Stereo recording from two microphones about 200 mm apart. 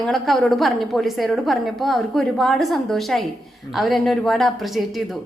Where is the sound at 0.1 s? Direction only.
Centre (ahead or behind).